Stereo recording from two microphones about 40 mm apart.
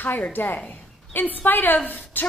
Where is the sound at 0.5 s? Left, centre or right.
Left.